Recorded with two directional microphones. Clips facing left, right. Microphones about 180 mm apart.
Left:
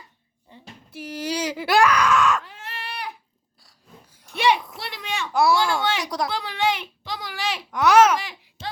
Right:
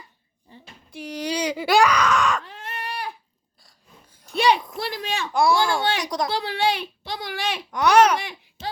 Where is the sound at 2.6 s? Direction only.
35° right (ahead or behind).